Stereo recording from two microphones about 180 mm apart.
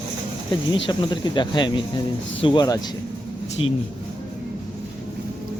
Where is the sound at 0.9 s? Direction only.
25° left (ahead or behind).